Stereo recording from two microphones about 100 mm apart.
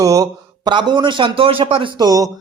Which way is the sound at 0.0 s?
35° right (ahead or behind).